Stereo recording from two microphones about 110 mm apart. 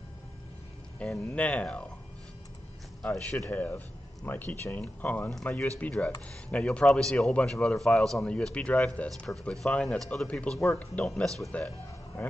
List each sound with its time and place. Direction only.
0.9 s a man's voice: 10° left (ahead or behind)
3.0 s a man's voice: 10° left (ahead or behind)